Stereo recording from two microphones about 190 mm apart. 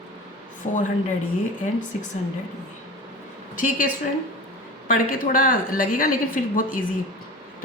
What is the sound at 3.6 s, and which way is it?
A woman's voice, 45° left (ahead or behind).